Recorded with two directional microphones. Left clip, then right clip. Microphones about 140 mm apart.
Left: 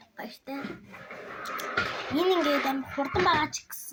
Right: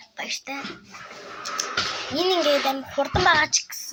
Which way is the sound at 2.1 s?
40° right (ahead or behind).